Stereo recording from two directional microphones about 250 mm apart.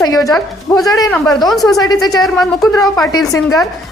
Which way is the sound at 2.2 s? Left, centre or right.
Centre.